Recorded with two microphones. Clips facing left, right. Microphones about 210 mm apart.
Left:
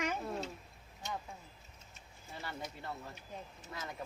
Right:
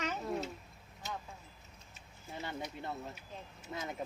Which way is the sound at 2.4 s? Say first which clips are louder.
Right 3 dB; 20° right (ahead or behind).